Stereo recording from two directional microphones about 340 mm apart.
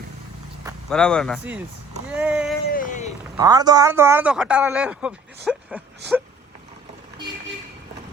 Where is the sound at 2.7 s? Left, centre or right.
Left.